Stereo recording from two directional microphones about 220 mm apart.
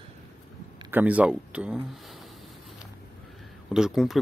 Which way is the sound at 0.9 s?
5° right (ahead or behind).